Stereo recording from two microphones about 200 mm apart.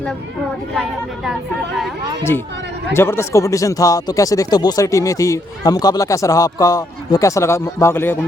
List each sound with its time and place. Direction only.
0.8 s speech: centre (ahead or behind)
2.9 s speech: 10° left (ahead or behind)